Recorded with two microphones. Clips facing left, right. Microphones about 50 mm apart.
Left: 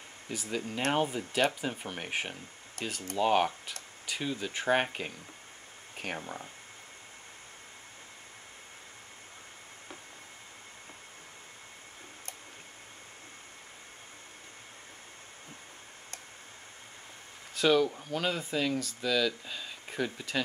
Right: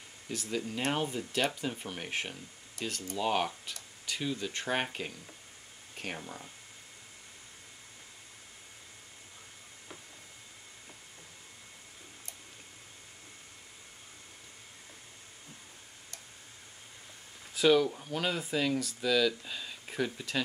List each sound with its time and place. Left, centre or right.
0.3 s speech: centre
0.6 s speech: centre
2.8 s speech: left
3.2 s speech: centre
6.1 s speech: left
17.6 s speech: centre